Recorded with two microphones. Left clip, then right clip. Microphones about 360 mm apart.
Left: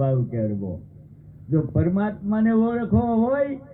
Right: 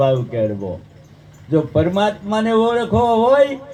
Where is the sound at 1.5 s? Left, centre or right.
Right.